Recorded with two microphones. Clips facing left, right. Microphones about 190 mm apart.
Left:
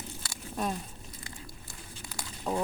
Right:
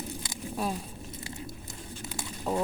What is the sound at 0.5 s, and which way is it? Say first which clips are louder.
Speech: right 1 dB; 5° right (ahead or behind).